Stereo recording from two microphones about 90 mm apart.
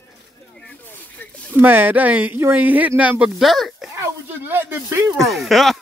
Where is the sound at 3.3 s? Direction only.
Centre (ahead or behind).